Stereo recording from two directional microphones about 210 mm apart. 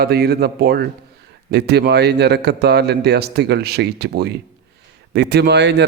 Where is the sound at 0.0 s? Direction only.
50° right (ahead or behind).